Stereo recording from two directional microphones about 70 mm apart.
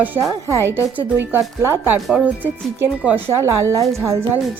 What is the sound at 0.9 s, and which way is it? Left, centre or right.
Speech, right.